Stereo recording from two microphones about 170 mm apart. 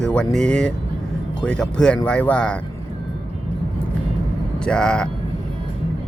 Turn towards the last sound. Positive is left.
turn(degrees=5)  # may be behind; listen again after turning